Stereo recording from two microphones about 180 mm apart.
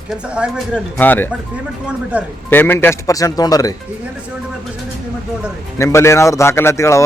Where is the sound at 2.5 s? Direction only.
10° left (ahead or behind).